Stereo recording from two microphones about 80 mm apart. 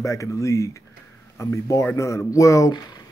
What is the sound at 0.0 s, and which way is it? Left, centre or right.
Speech, left.